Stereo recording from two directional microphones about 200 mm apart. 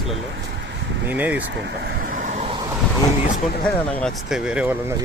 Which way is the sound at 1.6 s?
50° right (ahead or behind).